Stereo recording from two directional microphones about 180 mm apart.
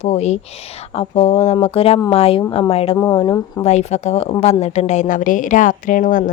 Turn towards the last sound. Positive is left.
turn(degrees=45)  # may be behind; listen again after turning